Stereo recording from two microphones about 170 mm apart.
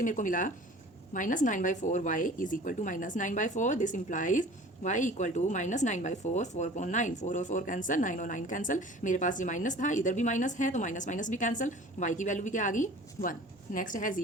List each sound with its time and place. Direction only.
0.0 s speech: 50° left (ahead or behind)